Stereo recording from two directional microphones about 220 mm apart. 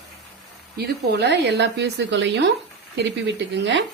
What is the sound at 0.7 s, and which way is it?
Speech, 45° right (ahead or behind).